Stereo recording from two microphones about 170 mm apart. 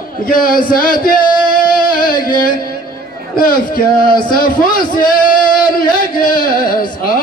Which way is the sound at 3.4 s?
55° left (ahead or behind).